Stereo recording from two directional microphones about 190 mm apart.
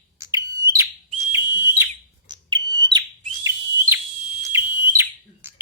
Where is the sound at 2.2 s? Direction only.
20° right (ahead or behind).